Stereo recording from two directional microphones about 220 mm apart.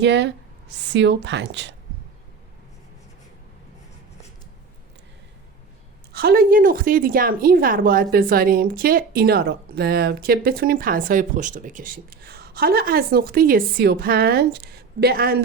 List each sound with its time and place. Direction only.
0.0 s a woman's voice: 55° right (ahead or behind)
6.1 s a woman's voice: 40° right (ahead or behind)